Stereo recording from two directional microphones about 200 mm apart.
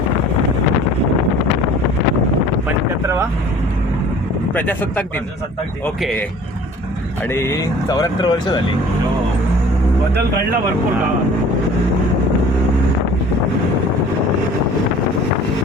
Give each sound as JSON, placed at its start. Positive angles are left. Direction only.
{"t": 2.6, "sound": "wind noise", "side_deg": -15}
{"t": 4.5, "sound": "speech", "side_deg": 10}
{"t": 7.3, "sound": "speech", "side_deg": 10}